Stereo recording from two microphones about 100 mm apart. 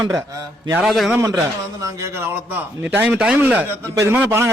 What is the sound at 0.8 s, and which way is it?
Speech, centre (ahead or behind).